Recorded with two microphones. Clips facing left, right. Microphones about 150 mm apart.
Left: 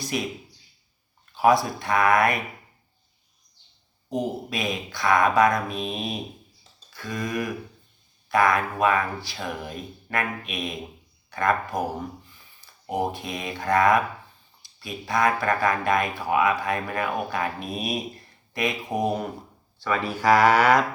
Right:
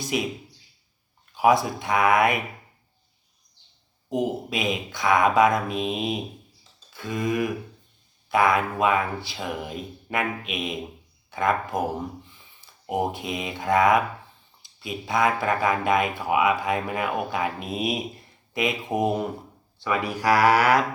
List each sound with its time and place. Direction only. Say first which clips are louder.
0.0 s speech: right 2 dB; 20° right (ahead or behind)
1.3 s speech: even; 15° right (ahead or behind)
4.1 s speech: right 2 dB; 20° right (ahead or behind)